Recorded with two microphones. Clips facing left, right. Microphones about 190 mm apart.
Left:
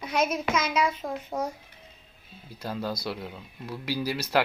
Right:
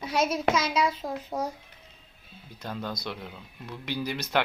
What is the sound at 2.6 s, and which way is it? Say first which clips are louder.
Speech: left 3 dB; 5° left (ahead or behind).